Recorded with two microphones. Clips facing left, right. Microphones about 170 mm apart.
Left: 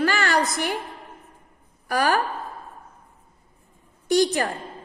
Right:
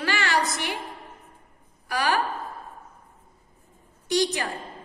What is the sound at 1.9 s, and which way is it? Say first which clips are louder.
Speech: left 4 dB; 45° left (ahead or behind).